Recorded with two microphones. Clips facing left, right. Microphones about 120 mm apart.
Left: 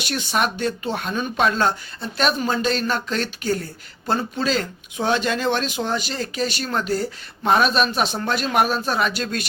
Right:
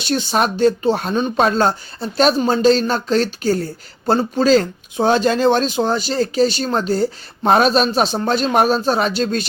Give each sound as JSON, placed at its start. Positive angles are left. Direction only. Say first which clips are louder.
{"t": 0.0, "sound": "speech", "louder": "right 5 dB", "side_deg": -30}